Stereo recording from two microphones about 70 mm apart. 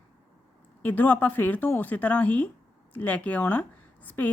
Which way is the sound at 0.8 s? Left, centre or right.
Left.